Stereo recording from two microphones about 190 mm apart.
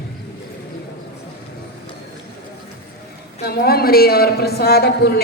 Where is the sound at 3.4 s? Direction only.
55° left (ahead or behind).